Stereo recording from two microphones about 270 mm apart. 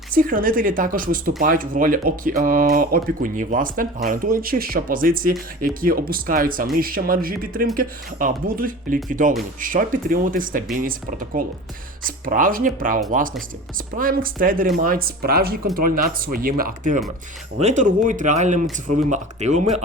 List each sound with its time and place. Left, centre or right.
0.1 s speech: right